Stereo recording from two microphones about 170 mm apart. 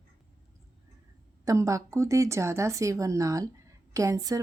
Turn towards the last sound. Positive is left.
turn(degrees=-20)  # may be behind; listen again after turning